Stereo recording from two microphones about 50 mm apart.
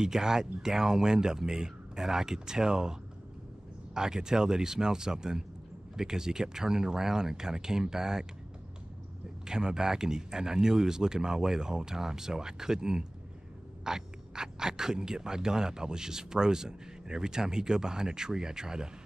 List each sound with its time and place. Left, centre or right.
0.0 s speech: centre
9.5 s speech: centre